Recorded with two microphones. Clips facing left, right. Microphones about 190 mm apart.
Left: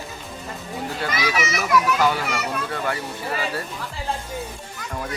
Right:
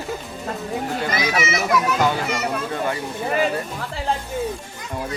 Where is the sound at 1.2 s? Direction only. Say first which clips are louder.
Right 1 dB; 25° right (ahead or behind).